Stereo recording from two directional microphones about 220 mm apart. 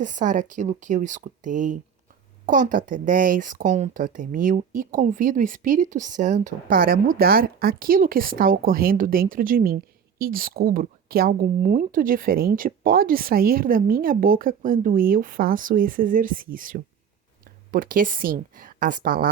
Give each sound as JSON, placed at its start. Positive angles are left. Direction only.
{"t": 0.0, "sound": "speech", "side_deg": -35}